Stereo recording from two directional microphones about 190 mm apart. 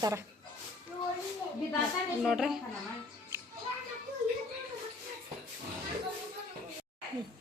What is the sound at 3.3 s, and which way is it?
Children playing, 15° right (ahead or behind).